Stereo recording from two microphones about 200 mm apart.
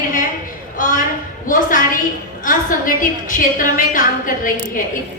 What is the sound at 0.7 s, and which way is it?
A woman's voice, 40° left (ahead or behind).